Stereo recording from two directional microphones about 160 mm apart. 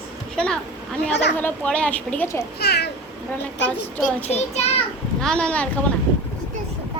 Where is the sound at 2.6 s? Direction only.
90° left.